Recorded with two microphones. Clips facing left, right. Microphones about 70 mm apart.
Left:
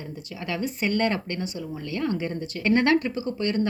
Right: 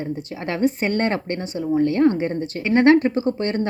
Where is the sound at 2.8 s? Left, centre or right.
Right.